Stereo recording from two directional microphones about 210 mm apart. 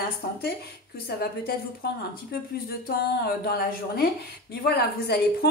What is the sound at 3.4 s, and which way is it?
A woman's voice, 50° left (ahead or behind).